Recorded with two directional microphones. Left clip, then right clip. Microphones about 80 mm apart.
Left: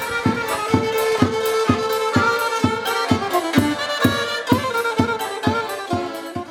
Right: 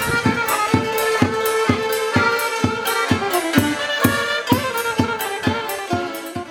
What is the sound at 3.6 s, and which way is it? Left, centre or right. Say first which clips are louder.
Music: right 1 dB; right.